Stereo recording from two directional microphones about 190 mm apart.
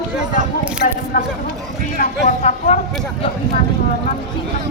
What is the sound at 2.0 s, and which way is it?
Speech, 40° left (ahead or behind).